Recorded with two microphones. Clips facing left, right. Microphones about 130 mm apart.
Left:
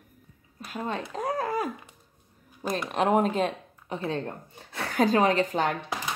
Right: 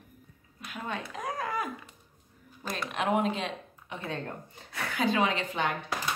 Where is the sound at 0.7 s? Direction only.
35° left (ahead or behind).